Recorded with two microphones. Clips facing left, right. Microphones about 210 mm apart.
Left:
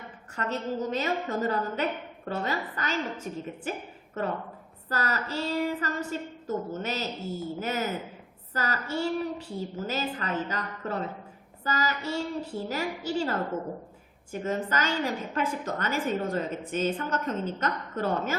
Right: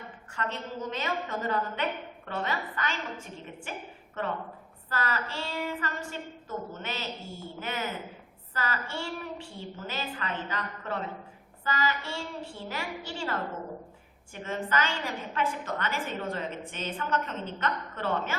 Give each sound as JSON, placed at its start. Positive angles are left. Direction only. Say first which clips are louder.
{"t": 0.3, "sound": "a woman's voice", "louder": "left 5 dB", "side_deg": 40}